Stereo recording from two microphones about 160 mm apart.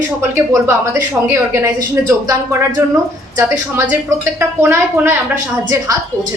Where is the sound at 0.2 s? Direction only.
15° right (ahead or behind).